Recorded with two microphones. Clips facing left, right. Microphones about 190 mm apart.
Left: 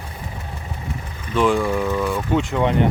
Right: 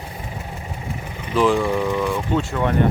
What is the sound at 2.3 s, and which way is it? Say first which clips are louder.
Speech: left 4 dB; 15° left (ahead or behind).